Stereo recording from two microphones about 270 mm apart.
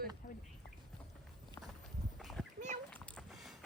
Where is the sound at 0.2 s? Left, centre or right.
Left.